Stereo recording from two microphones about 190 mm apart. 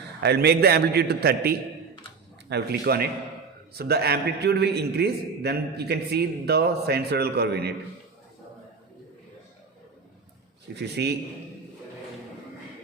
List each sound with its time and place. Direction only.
0.2 s a man's voice: 60° right (ahead or behind)
10.8 s a man's voice: 60° right (ahead or behind)